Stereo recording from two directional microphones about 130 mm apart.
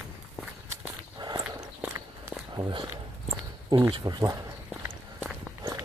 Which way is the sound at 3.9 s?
35° right (ahead or behind).